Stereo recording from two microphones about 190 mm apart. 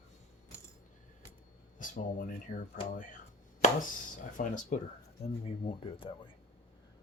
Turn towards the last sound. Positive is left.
turn(degrees=30)  # may be behind; listen again after turning